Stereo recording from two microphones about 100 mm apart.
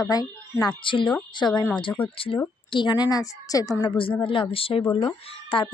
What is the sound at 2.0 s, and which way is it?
Speech, 60° left (ahead or behind).